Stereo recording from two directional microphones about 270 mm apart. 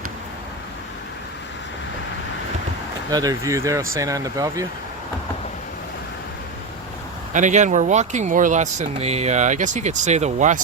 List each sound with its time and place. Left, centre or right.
3.1 s speech: centre
7.3 s speech: right